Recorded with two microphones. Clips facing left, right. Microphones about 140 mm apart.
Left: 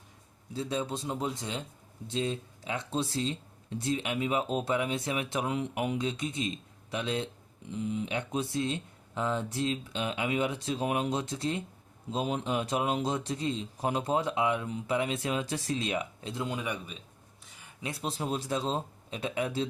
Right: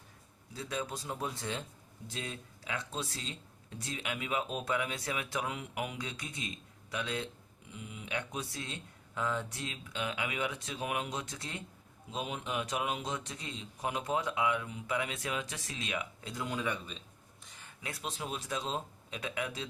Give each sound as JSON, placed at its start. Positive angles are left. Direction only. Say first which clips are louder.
{"t": 0.5, "sound": "speech", "louder": "left 6 dB", "side_deg": 25}
{"t": 17.8, "sound": "speech", "louder": "left 6 dB", "side_deg": 30}